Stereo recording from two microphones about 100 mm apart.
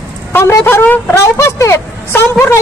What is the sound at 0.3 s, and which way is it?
Speech, 25° left (ahead or behind).